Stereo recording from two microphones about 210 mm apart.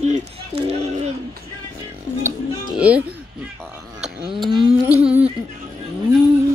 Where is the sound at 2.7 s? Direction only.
5° right (ahead or behind).